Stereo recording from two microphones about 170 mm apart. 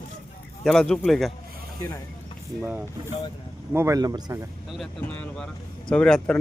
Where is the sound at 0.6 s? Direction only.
5° left (ahead or behind).